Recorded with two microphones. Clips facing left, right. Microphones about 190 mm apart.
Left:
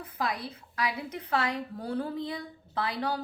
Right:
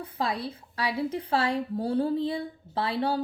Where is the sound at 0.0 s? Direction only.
30° right (ahead or behind).